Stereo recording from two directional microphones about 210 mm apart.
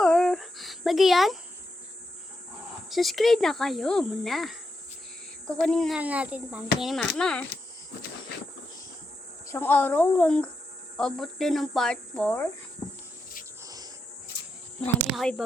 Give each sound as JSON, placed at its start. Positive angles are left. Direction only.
{"t": 0.0, "sound": "a sound", "side_deg": 0}
{"t": 2.9, "sound": "speech", "side_deg": 0}
{"t": 9.5, "sound": "speech", "side_deg": 10}
{"t": 13.6, "sound": "insect", "side_deg": -15}
{"t": 15.1, "sound": "speech", "side_deg": 0}